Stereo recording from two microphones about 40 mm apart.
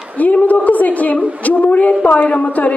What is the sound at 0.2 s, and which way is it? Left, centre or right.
A woman's voice, left.